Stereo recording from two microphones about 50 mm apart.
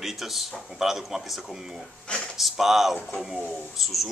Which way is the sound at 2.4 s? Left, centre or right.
Centre.